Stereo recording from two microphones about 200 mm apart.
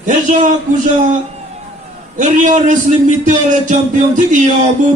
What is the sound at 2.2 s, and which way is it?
Speech, 40° right (ahead or behind).